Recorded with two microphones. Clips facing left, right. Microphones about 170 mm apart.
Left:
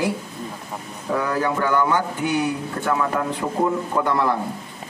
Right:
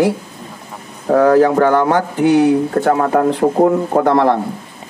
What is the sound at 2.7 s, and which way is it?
Speech, 50° right (ahead or behind).